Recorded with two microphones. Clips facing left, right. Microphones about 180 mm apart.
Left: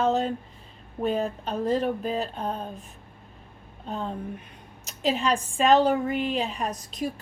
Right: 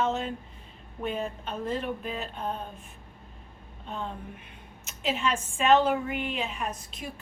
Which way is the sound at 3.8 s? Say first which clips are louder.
Left 5 dB; 35° left (ahead or behind).